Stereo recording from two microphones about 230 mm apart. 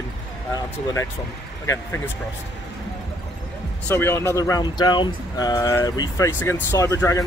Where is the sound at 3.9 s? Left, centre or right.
Centre.